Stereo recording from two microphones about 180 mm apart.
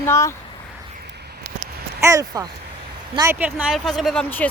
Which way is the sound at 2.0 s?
15° right (ahead or behind).